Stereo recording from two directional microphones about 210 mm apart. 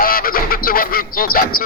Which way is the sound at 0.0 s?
45° left (ahead or behind).